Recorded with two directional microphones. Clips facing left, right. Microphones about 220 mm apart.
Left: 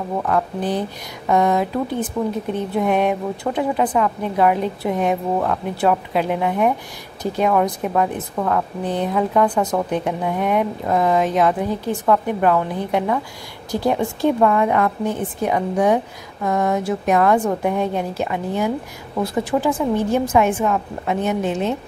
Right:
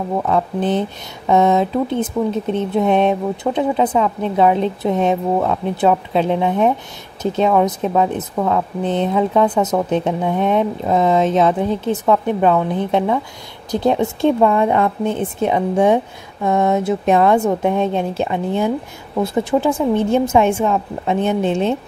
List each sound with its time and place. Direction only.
0.3 s speech: 25° right (ahead or behind)